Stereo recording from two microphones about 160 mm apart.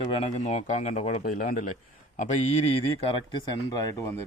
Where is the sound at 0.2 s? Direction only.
45° left (ahead or behind); by 1.7 s 60° left (ahead or behind).